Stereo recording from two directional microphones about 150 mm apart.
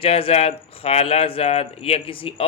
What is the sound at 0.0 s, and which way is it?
Speech, 40° left (ahead or behind).